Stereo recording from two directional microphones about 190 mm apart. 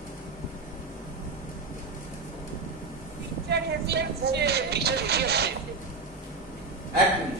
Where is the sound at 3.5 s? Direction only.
60° right (ahead or behind).